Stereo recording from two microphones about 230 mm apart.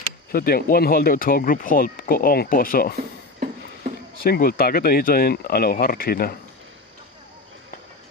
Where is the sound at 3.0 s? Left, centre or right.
Right.